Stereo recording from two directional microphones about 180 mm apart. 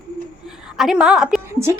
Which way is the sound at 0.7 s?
Centre (ahead or behind).